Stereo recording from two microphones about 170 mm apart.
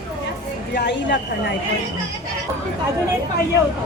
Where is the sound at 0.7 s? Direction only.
85° left.